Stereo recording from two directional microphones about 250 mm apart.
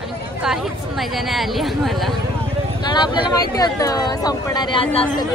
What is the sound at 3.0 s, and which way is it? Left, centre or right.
Speech, centre.